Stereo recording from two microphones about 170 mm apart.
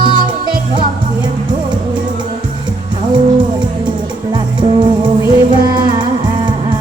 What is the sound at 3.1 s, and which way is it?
Music, 25° right (ahead or behind).